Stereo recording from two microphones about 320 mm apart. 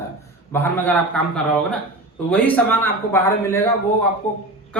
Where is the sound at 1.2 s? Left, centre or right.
Centre.